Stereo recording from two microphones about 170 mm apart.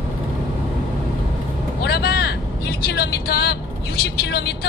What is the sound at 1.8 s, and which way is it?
Vehicle, 70° left (ahead or behind).